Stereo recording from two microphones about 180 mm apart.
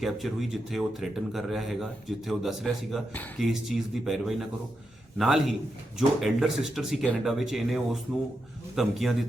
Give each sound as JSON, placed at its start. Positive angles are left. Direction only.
{"t": 0.0, "sound": "speech", "side_deg": 0}
{"t": 3.1, "sound": "speech", "side_deg": 10}
{"t": 3.5, "sound": "a man's voice", "side_deg": 0}